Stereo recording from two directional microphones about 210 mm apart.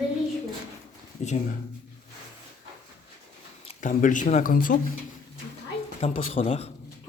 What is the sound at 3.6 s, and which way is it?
Speech, 35° left (ahead or behind).